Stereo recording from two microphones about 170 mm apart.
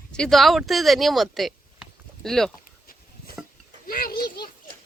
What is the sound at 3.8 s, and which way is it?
Children playing, 60° left (ahead or behind).